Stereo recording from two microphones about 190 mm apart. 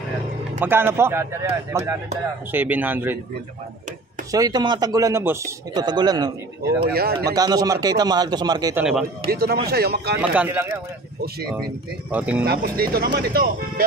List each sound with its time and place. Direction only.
0.6 s speech: 10° right (ahead or behind)
4.3 s speech: 20° right (ahead or behind)
6.9 s speech: 55° right (ahead or behind)
7.3 s speech: 20° right (ahead or behind)
9.3 s speech: 55° right (ahead or behind)
10.3 s speech: 10° right (ahead or behind)
12.1 s speech: 10° right (ahead or behind)
12.4 s speech: 50° right (ahead or behind)